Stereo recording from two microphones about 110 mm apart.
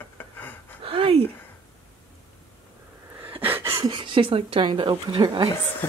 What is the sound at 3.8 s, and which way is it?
Speech, 50° right (ahead or behind).